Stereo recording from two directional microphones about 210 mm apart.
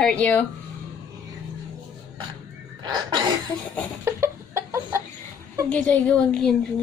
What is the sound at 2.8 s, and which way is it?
Speech, 20° right (ahead or behind).